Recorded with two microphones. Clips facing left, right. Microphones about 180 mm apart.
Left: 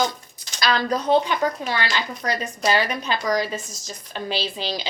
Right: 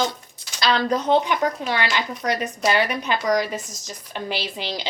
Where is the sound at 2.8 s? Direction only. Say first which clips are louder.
Right 2 dB; 15° right (ahead or behind).